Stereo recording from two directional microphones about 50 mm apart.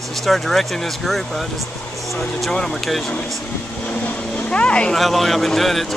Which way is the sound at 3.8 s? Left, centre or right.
Left.